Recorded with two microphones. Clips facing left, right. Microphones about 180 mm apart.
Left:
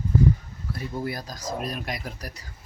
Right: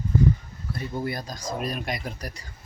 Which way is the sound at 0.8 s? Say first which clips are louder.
Right 1 dB; centre (ahead or behind).